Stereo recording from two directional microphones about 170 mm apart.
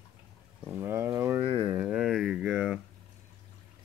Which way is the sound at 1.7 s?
5° right (ahead or behind).